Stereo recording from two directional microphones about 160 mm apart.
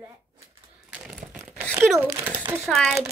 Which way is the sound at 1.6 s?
15° right (ahead or behind).